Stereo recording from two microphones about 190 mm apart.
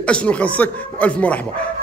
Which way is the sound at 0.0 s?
5° left (ahead or behind).